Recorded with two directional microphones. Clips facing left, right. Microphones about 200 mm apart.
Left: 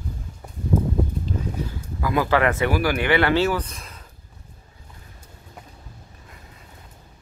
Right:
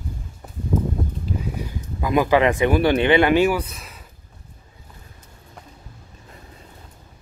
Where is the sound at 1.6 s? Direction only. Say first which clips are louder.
Right 1 dB; 20° right (ahead or behind).